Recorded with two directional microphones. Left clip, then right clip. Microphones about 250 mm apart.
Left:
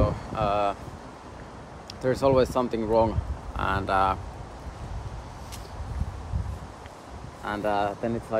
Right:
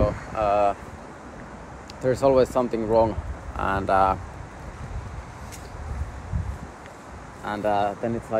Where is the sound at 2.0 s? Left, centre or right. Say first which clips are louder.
Right 3 dB; centre.